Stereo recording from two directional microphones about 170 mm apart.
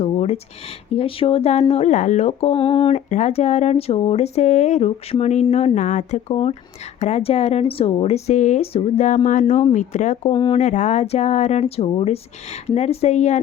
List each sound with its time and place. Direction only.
0.0 s a sound: 40° left (ahead or behind)
0.9 s speech: 35° left (ahead or behind)
10.3 s speech: 25° left (ahead or behind)
10.6 s speech: 45° left (ahead or behind)